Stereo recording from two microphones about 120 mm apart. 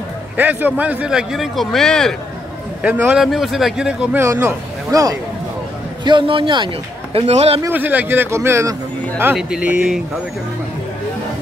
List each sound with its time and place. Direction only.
0.4 s a man's voice: 15° right (ahead or behind); by 2.1 s 5° left (ahead or behind)
2.8 s a man's voice: 15° right (ahead or behind)
3.1 s a man's voice: centre (ahead or behind)
4.2 s a man's voice: 20° right (ahead or behind)
6.0 s speech: 45° right (ahead or behind)
7.2 s a man's voice: 60° right (ahead or behind)
7.7 s a man's voice: 15° right (ahead or behind)
9.4 s a man's voice: 10° right (ahead or behind)